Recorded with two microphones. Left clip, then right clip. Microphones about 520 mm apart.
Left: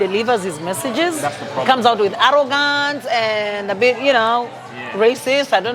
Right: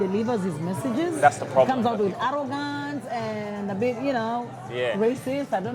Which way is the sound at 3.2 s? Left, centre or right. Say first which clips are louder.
Left 13 dB; centre.